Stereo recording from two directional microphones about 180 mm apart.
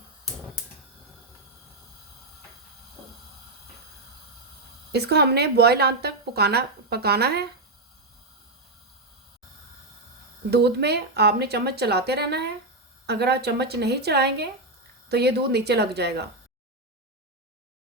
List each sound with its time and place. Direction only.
4.9 s speech: 65° right (ahead or behind)
10.5 s speech: 65° right (ahead or behind)